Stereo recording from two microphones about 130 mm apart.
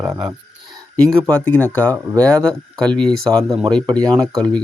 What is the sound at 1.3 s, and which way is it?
Speech, 15° left (ahead or behind).